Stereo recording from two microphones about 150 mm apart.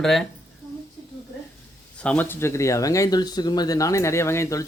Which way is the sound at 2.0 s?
10° left (ahead or behind).